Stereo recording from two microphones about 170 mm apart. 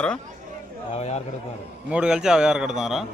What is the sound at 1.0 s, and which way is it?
Speech, 40° left (ahead or behind).